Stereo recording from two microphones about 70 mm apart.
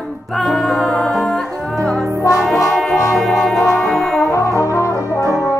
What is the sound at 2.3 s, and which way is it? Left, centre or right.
Music, left.